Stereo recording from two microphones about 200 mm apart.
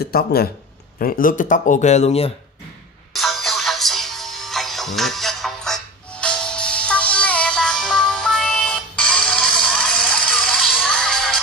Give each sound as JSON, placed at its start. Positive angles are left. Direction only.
{"t": 0.0, "sound": "speech", "side_deg": 50}
{"t": 3.1, "sound": "music", "side_deg": 0}